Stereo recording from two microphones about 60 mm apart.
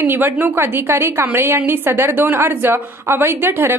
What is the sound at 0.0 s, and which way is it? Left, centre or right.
A woman's voice, right.